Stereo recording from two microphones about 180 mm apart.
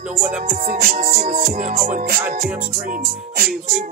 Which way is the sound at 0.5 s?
50° right (ahead or behind).